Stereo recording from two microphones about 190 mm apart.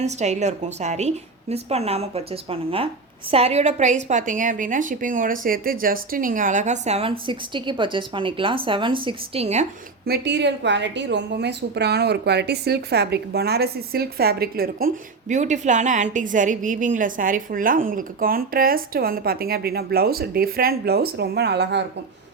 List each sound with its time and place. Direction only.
0.0 s a woman's voice: 35° right (ahead or behind)
10.1 s a woman's voice: 65° right (ahead or behind)